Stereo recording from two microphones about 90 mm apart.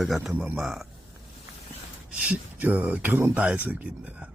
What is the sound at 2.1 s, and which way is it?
Speech, 15° right (ahead or behind).